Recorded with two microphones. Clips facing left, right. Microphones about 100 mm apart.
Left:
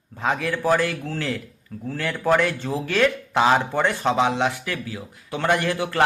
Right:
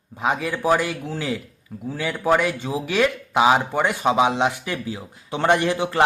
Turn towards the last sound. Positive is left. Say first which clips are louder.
# right 3 dB
turn(degrees=-20)  # may be behind; listen again after turning